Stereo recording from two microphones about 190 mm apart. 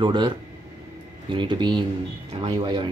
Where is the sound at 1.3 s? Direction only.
25° right (ahead or behind).